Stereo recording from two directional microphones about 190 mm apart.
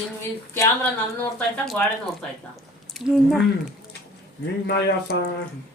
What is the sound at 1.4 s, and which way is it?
Speech, 5° left (ahead or behind).